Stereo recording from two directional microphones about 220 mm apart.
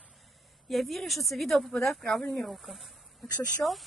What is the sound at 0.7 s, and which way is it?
Speech, centre (ahead or behind).